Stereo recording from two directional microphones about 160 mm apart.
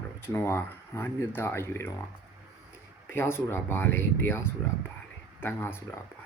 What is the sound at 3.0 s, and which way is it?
Speech, 15° left (ahead or behind).